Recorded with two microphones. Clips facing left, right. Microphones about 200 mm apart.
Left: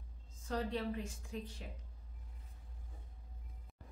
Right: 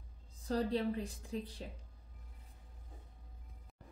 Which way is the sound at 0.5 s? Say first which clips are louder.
Right 4 dB; 35° right (ahead or behind).